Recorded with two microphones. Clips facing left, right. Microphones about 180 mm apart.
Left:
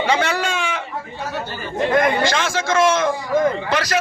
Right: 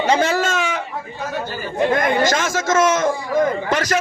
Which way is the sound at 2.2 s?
45° right (ahead or behind).